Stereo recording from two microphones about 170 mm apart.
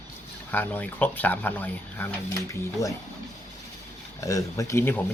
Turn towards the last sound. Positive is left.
turn(degrees=15)  # may be behind; listen again after turning